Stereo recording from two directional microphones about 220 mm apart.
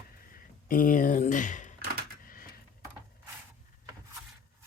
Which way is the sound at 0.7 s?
40° left (ahead or behind).